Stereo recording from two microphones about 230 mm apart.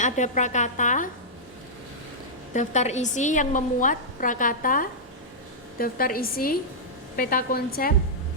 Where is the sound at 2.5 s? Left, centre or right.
Left.